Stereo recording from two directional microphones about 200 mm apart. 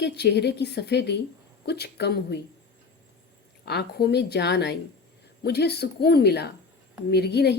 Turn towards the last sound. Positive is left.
turn(degrees=55)  # may be behind; listen again after turning